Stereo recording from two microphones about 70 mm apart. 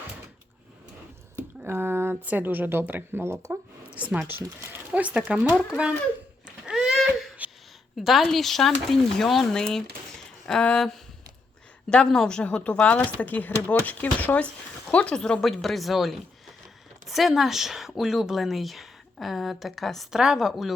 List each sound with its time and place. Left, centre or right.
1.4 s squish: right
2.2 s a woman's voice: right
3.9 s speech: centre
4.3 s speech: right
4.9 s speech: centre
6.7 s a sound: centre
7.1 s a sound: centre
7.9 s speech: centre